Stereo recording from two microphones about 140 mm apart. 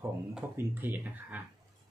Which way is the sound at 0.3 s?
10° right (ahead or behind).